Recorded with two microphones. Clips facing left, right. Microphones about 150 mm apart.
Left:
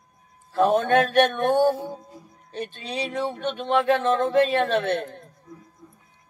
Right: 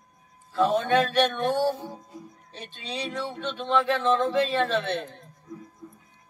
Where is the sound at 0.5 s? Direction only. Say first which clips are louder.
Left 3 dB; 50° left (ahead or behind).